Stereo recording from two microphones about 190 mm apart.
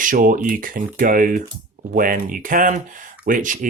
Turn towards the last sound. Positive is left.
turn(degrees=-45)  # may be behind; listen again after turning